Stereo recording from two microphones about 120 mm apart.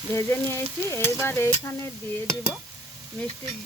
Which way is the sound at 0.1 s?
20° left (ahead or behind).